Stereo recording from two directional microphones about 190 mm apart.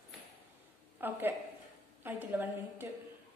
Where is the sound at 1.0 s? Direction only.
10° right (ahead or behind).